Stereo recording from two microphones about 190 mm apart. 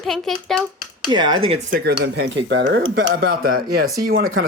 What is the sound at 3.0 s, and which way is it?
Speech, 50° right (ahead or behind).